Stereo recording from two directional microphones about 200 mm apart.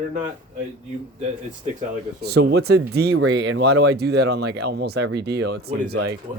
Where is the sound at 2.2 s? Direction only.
55° right (ahead or behind).